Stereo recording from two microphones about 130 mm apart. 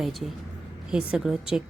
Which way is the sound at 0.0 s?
Centre (ahead or behind).